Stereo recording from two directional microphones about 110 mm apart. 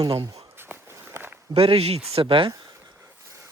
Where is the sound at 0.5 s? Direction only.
20° right (ahead or behind).